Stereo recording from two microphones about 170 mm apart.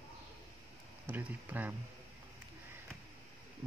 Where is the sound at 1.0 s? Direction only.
10° right (ahead or behind).